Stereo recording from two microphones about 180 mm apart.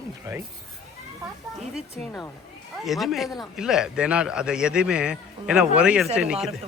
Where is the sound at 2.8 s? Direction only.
Centre (ahead or behind).